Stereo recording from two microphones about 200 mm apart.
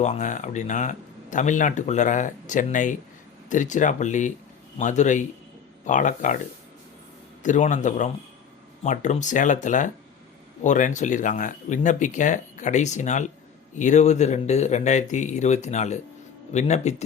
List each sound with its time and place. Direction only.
0.0 s speech: 35° left (ahead or behind)
7.4 s speech: 40° left (ahead or behind)